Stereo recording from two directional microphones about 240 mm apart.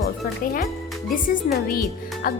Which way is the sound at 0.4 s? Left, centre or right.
Left.